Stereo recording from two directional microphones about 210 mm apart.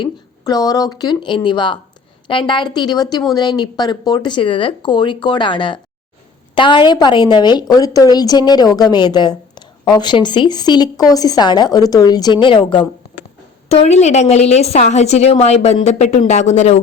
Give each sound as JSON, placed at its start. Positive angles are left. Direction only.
{"t": 0.0, "sound": "a woman's voice", "side_deg": 20}